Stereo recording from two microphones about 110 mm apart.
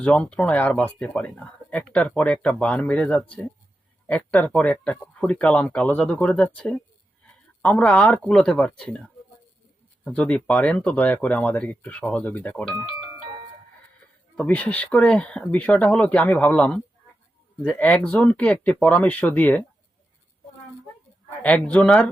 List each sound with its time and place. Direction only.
0.0 s speech: 10° left (ahead or behind)
10.0 s speech: 10° left (ahead or behind)
14.3 s speech: 15° left (ahead or behind)
21.4 s speech: 10° left (ahead or behind)